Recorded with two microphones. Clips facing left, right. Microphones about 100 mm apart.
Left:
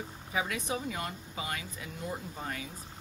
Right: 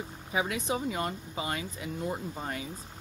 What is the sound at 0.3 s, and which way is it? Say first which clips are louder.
Speech: right 3 dB; 20° right (ahead or behind).